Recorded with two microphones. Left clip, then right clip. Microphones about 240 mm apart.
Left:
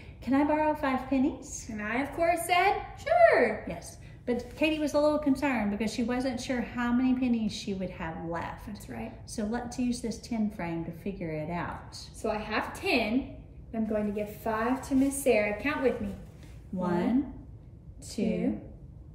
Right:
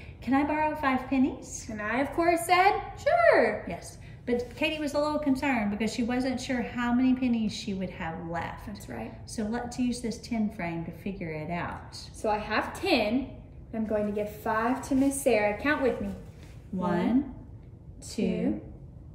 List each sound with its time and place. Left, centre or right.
0.2 s a woman's voice: centre
1.8 s a woman's voice: centre
4.3 s a woman's voice: centre
12.2 s a woman's voice: centre
16.8 s a woman's voice: centre